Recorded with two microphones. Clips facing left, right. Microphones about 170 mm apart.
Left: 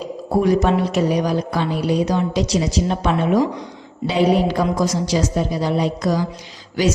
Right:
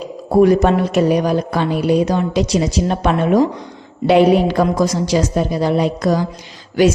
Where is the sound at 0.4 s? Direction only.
55° right (ahead or behind).